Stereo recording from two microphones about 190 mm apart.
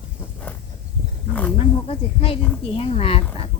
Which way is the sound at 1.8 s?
30° left (ahead or behind).